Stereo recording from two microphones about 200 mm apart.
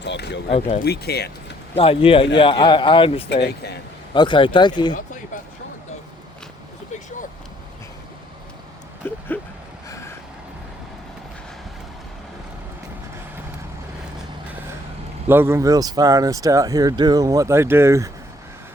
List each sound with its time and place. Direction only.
0.0 s a sound: 60° left (ahead or behind)
0.9 s speech: 55° left (ahead or behind)
1.7 s speech: 30° left (ahead or behind)
3.4 s speech: 55° left (ahead or behind)
4.1 s speech: 25° left (ahead or behind)
4.9 s speech: 40° left (ahead or behind)
9.0 s a sound: 10° left (ahead or behind)
14.2 s vehicle: 10° right (ahead or behind)
15.3 s speech: 10° right (ahead or behind)